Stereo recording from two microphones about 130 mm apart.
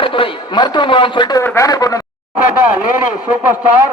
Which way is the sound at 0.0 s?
40° left (ahead or behind).